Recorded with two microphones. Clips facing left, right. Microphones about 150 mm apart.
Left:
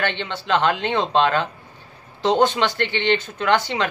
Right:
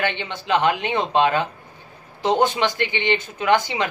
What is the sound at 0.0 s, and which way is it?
A man's voice, 15° right (ahead or behind).